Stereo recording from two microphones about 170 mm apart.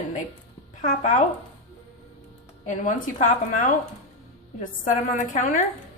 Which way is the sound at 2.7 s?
50° left (ahead or behind).